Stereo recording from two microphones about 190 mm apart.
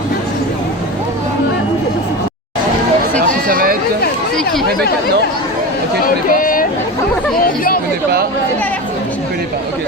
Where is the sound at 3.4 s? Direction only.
50° right (ahead or behind).